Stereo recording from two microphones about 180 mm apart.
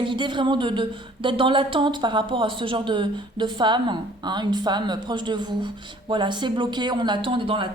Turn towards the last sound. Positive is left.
turn(degrees=-30)  # may be behind; listen again after turning